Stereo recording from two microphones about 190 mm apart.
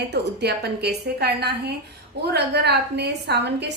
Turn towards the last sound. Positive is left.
turn(degrees=-60)  # may be behind; listen again after turning